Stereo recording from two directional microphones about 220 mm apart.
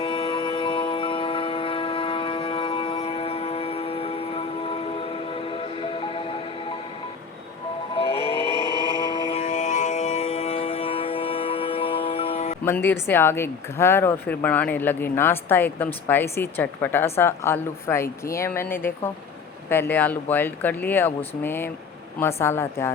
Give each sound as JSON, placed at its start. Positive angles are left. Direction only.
{"t": 0.0, "sound": "music", "side_deg": 25}
{"t": 7.9, "sound": "music", "side_deg": 25}
{"t": 8.4, "sound": "music", "side_deg": -20}
{"t": 9.1, "sound": "music", "side_deg": 30}
{"t": 12.6, "sound": "speech", "side_deg": 10}